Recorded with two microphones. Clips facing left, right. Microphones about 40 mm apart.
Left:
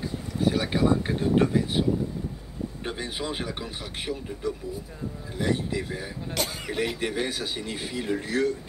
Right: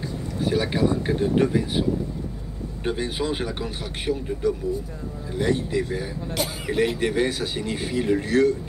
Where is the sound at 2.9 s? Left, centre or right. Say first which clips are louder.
Right 8 dB; centre.